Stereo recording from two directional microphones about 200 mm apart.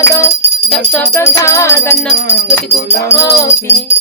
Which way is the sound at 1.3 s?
15° left (ahead or behind).